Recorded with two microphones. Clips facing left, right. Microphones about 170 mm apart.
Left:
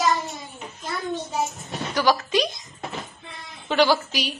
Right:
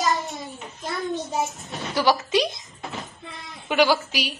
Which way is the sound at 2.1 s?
20° right (ahead or behind).